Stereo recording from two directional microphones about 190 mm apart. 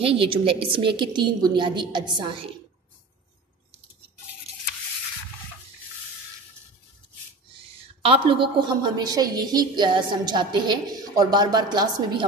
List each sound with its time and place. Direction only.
0.0 s a woman's voice: 30° right (ahead or behind)
8.0 s a woman's voice: 30° right (ahead or behind)